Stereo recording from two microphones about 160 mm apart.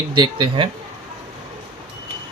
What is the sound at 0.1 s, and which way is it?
Speech, 30° right (ahead or behind).